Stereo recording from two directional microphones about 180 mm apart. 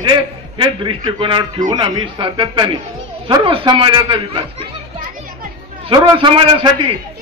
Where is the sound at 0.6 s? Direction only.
30° right (ahead or behind).